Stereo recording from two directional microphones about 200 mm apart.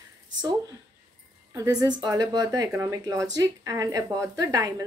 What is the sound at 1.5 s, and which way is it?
A woman's voice, 15° right (ahead or behind).